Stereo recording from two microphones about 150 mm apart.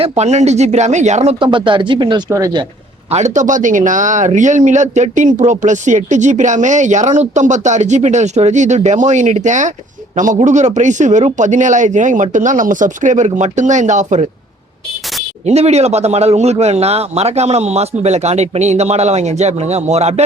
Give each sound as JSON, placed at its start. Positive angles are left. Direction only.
{"t": 0.2, "sound": "speech", "side_deg": -50}
{"t": 1.5, "sound": "speech", "side_deg": -35}
{"t": 3.1, "sound": "speech", "side_deg": -50}
{"t": 15.4, "sound": "speech", "side_deg": -45}